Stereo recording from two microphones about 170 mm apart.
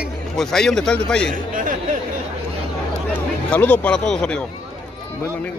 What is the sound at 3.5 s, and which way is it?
Speech, 10° left (ahead or behind).